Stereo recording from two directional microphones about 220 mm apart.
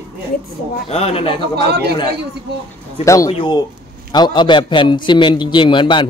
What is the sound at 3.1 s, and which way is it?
A man's voice, 20° left (ahead or behind).